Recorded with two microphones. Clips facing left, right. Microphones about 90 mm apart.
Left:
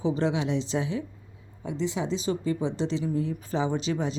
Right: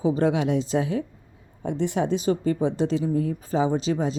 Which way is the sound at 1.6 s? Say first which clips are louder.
Right 5 dB; 60° right (ahead or behind).